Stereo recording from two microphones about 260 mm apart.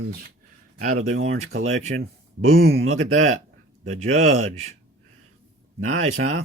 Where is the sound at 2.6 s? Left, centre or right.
Right.